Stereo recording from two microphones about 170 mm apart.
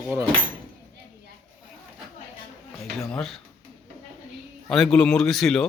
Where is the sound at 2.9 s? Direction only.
Centre (ahead or behind).